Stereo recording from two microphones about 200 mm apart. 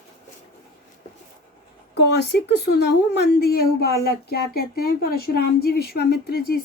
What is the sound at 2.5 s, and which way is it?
A woman's voice, 55° left (ahead or behind).